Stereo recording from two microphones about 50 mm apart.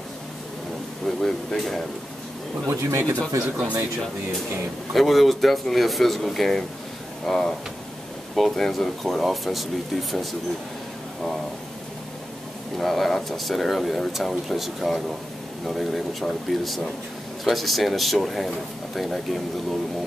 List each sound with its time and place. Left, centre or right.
1.0 s speech: centre
2.6 s speech: right
3.4 s speech: right
4.9 s speech: centre
12.7 s speech: centre